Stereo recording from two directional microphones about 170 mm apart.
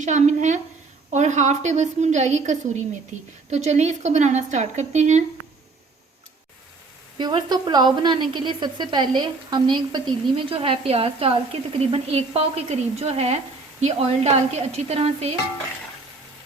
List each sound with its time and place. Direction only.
0.0 s a woman's voice: 45° right (ahead or behind)
7.2 s a woman's voice: 25° right (ahead or behind)